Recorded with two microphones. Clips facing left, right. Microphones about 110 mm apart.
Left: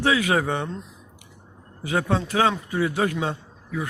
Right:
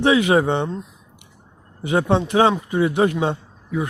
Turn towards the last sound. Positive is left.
turn(degrees=-20)  # may be behind; listen again after turning